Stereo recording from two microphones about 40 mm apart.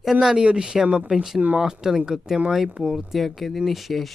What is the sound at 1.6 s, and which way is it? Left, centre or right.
Speech, centre.